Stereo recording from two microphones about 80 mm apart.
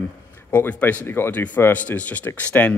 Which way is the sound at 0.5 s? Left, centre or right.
Left.